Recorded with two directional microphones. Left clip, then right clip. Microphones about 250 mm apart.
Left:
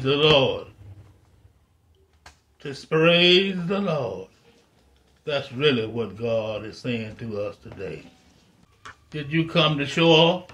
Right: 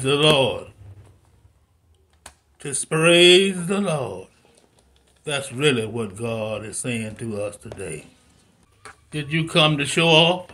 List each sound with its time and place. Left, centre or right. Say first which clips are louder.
0.0 s speech: right 1 dB; right
2.6 s speech: even; right